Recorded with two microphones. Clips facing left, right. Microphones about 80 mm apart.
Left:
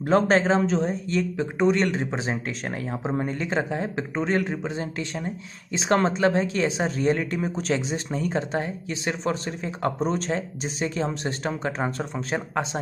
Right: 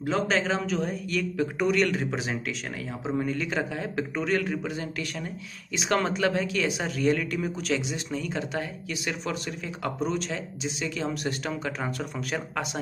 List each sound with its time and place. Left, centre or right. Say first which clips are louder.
0.0 s a man's voice: left 6 dB; left